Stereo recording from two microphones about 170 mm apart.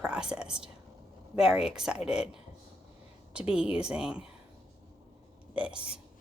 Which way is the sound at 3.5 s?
5° right (ahead or behind).